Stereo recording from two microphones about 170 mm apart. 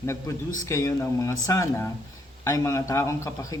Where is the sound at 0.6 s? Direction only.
20° left (ahead or behind).